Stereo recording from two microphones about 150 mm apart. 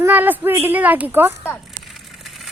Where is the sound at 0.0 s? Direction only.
10° right (ahead or behind).